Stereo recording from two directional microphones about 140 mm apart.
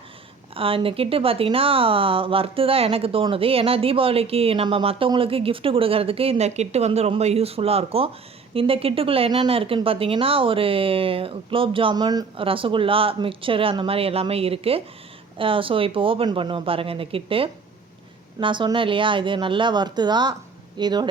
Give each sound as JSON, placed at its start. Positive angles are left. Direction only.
{"t": 0.5, "sound": "speech", "side_deg": -40}